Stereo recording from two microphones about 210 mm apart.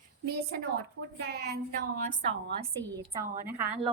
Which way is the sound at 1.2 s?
50° right (ahead or behind).